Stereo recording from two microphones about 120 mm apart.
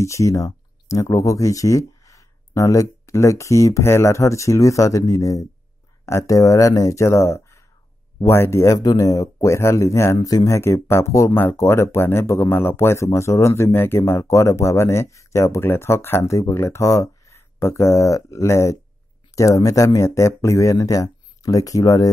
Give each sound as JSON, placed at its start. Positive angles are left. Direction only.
{"t": 0.0, "sound": "speech", "side_deg": 25}